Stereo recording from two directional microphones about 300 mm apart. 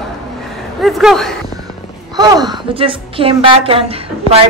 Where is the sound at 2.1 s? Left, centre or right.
Centre.